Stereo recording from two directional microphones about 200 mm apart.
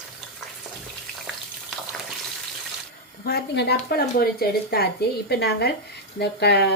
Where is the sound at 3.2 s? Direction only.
55° left (ahead or behind).